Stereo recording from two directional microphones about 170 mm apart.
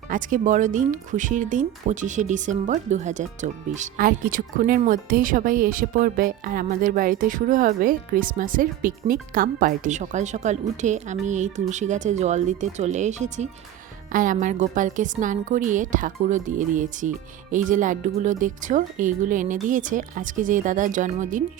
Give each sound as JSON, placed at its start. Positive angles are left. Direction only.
{"t": 0.1, "sound": "speech", "side_deg": -50}